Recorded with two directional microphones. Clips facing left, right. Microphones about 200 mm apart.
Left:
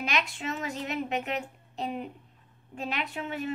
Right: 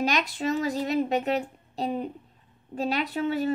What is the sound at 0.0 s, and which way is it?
A woman's voice, 35° right (ahead or behind).